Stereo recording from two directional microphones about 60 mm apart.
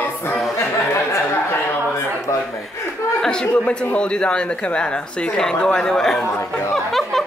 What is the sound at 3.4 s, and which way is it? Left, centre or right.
A man's voice, left.